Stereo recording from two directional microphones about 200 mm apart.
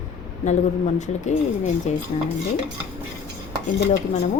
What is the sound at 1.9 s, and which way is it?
Speech, 35° left (ahead or behind).